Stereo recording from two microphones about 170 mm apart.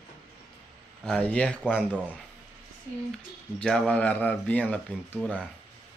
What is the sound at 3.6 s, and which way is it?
Speech, 5° left (ahead or behind).